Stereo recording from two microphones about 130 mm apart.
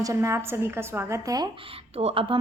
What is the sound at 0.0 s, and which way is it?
A woman's voice, 20° right (ahead or behind).